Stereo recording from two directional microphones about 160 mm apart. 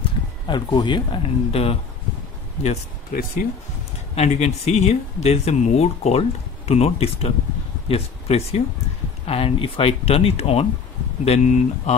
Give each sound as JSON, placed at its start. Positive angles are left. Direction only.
{"t": 0.5, "sound": "speech", "side_deg": 30}
{"t": 2.6, "sound": "speech", "side_deg": 50}
{"t": 4.1, "sound": "speech", "side_deg": 45}